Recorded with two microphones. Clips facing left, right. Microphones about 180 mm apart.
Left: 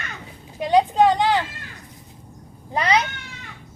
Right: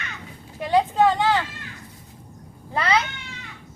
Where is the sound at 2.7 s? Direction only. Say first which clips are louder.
Left 2 dB; 15° left (ahead or behind).